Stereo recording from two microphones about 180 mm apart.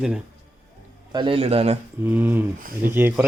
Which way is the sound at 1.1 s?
30° right (ahead or behind).